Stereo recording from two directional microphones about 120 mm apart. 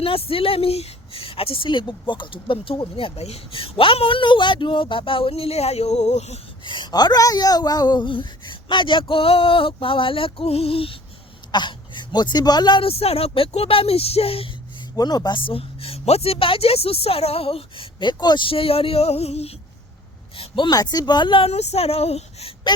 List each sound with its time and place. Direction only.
0.0 s speech: 50° left (ahead or behind)
6.7 s speech: 40° left (ahead or behind)
11.5 s speech: 40° left (ahead or behind)
12.8 s speech: 55° left (ahead or behind)
14.9 s speech: 35° left (ahead or behind); by 19.5 s 60° left (ahead or behind)
20.3 s a sound: 50° left (ahead or behind)
20.7 s speech: 35° left (ahead or behind); by 22.5 s 60° left (ahead or behind)